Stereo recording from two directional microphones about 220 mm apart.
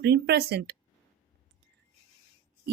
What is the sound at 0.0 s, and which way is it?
Speech, 50° right (ahead or behind).